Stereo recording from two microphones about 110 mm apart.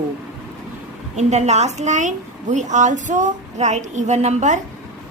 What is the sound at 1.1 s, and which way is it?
A woman's voice, 90° right.